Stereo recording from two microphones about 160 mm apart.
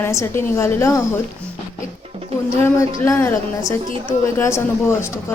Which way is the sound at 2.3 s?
40° right (ahead or behind).